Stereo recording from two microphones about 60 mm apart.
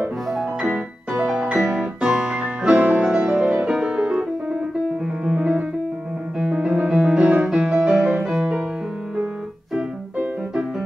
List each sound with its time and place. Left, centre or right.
0.3 s music: centre
5.2 s piano: centre
8.3 s music: centre